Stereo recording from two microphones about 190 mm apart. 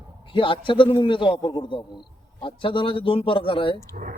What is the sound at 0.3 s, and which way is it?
Speech, 25° left (ahead or behind).